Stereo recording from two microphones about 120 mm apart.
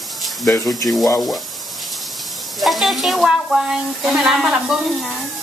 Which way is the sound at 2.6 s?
Centre (ahead or behind).